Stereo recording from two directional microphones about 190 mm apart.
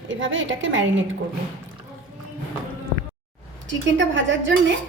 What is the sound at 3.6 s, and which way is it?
A woman's voice, 75° right (ahead or behind).